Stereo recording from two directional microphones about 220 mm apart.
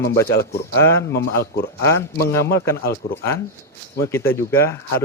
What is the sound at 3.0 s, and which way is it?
Speech, 45° left (ahead or behind).